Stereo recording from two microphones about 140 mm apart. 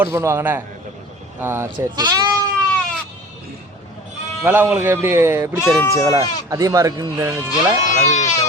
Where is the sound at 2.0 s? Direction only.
30° right (ahead or behind).